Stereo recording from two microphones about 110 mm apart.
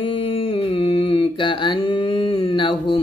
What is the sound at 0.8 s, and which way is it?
Mantra, 55° left (ahead or behind).